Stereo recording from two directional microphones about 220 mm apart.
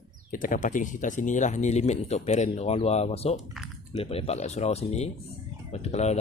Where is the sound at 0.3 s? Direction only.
35° left (ahead or behind).